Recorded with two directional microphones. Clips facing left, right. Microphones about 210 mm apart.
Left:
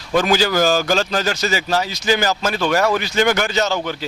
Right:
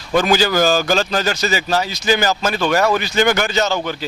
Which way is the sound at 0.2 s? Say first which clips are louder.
Right 1 dB; 15° right (ahead or behind).